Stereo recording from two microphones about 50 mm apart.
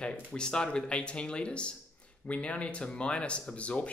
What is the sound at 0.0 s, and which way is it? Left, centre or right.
Speech, centre.